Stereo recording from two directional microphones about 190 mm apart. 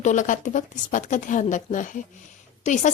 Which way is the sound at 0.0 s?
40° left (ahead or behind).